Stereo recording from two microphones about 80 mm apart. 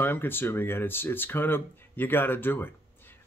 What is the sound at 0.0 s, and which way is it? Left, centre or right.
Speech, left.